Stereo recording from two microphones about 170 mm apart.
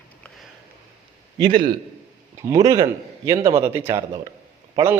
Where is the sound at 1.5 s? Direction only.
55° right (ahead or behind).